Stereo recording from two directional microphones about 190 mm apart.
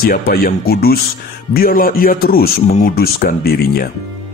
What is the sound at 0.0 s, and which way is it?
Music, 50° left (ahead or behind).